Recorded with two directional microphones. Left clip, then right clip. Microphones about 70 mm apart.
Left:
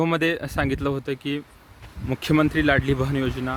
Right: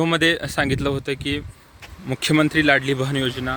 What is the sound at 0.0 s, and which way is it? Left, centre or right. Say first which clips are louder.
Speech: right 4 dB; left.